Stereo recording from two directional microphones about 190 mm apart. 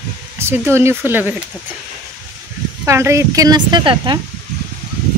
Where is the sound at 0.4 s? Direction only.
15° right (ahead or behind).